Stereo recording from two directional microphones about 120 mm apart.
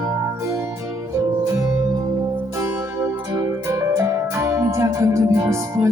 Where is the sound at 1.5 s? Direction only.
25° right (ahead or behind).